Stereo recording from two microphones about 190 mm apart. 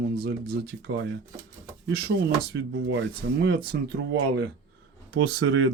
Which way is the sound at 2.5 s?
65° right (ahead or behind).